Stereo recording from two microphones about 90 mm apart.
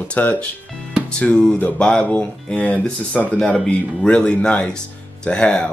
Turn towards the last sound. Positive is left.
turn(degrees=10)  # may be behind; listen again after turning